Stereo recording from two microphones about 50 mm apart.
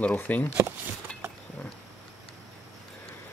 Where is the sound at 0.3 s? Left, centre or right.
Left.